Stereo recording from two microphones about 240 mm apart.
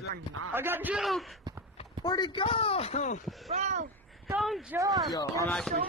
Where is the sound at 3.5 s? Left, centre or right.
Right.